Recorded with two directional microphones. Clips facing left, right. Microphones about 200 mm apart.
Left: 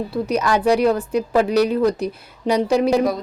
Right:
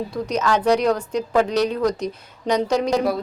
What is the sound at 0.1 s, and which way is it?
A woman's voice, 10° left (ahead or behind).